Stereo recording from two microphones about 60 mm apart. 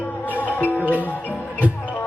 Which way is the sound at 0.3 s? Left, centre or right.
Left.